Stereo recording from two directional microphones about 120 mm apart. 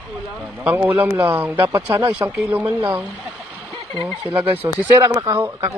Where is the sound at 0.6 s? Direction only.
15° right (ahead or behind).